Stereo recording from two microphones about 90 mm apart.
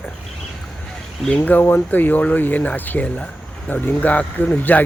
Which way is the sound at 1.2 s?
15° left (ahead or behind).